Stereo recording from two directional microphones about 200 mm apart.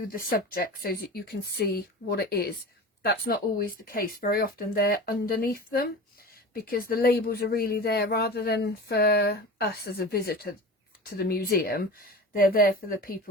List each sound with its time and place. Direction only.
0.1 s speech: 45° left (ahead or behind)